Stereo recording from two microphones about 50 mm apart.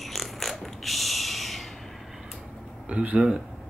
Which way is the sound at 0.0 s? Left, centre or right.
Centre.